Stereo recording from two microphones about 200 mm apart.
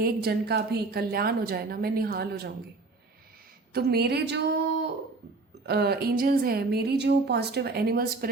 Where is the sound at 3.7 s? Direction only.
50° right (ahead or behind).